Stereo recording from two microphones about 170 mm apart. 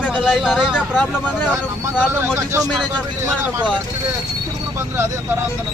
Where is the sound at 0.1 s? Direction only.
5° right (ahead or behind).